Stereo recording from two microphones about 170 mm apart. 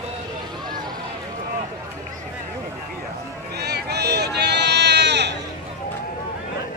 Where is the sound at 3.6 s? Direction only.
70° right (ahead or behind).